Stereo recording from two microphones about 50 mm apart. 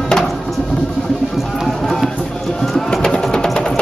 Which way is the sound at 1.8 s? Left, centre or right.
Centre.